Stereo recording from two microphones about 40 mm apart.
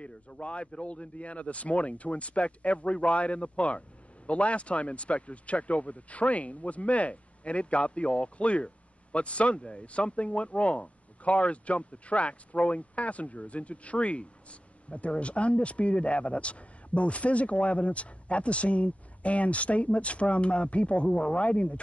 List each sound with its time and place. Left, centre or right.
0.0 s speech: left